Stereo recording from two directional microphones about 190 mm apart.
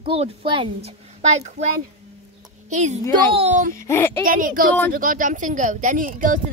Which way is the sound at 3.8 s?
15° left (ahead or behind).